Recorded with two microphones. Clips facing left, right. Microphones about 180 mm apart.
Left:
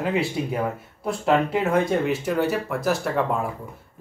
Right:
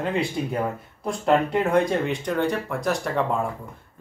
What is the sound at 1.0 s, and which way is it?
Speech, centre (ahead or behind).